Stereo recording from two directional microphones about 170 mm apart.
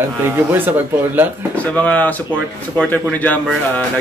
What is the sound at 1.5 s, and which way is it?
Speech, 10° left (ahead or behind).